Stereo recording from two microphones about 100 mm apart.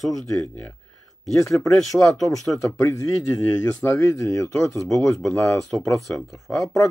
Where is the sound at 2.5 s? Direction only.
25° left (ahead or behind).